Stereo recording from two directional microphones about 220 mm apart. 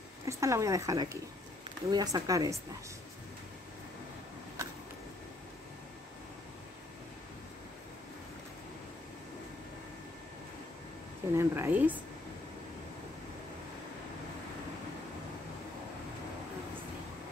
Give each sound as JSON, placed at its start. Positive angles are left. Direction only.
{"t": 0.2, "sound": "speech", "side_deg": -15}
{"t": 11.3, "sound": "speech", "side_deg": -10}